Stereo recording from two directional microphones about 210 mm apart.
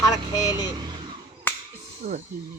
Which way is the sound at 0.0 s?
15° left (ahead or behind).